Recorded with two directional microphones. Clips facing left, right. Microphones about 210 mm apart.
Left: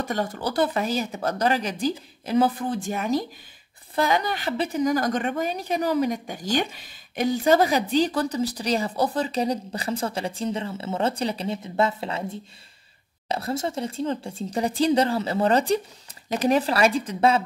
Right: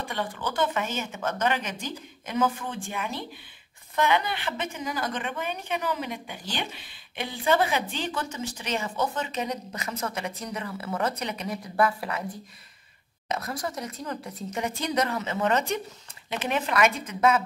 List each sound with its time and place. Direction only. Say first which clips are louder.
0.0 s a woman's voice: left 5 dB; 40° left (ahead or behind)